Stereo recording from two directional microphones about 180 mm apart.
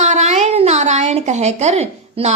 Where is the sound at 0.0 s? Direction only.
40° right (ahead or behind).